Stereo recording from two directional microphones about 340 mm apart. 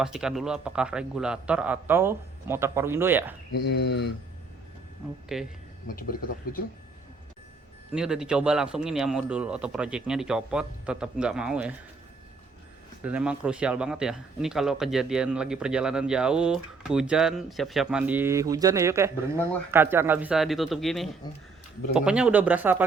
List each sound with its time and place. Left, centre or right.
0.0 s speech: centre
3.7 s speech: left
5.3 s speech: centre
5.9 s speech: left
7.9 s speech: centre
13.0 s speech: centre